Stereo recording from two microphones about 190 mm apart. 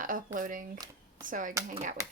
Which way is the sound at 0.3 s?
45° right (ahead or behind).